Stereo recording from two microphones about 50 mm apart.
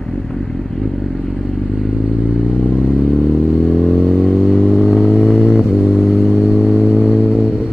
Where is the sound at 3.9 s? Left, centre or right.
Centre.